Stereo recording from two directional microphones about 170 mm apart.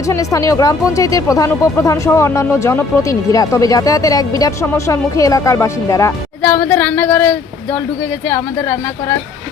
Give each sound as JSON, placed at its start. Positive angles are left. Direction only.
{"t": 0.1, "sound": "speech", "side_deg": 20}